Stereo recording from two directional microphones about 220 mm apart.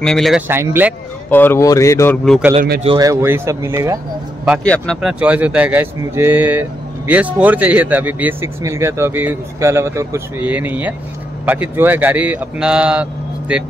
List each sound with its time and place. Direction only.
0.0 s speech: centre (ahead or behind)
0.5 s speech: 10° right (ahead or behind)
1.3 s speech: 10° left (ahead or behind)
2.2 s speech: centre (ahead or behind)
2.8 s speech: 20° right (ahead or behind)
4.6 s speech: 5° left (ahead or behind)